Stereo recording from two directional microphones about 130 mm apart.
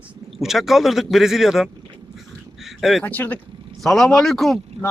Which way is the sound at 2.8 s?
Centre (ahead or behind).